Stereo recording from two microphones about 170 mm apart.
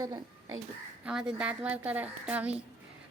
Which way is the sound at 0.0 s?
20° right (ahead or behind).